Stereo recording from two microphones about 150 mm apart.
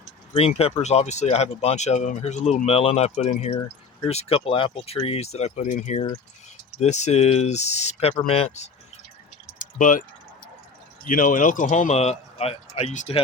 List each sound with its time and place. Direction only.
0.3 s speech: 40° left (ahead or behind)
9.6 s a sound: 60° left (ahead or behind)
11.0 s speech: 65° left (ahead or behind); by 13.1 s 50° left (ahead or behind)